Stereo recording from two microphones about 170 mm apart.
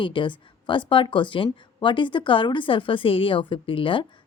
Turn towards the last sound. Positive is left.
turn(degrees=30)  # may be behind; listen again after turning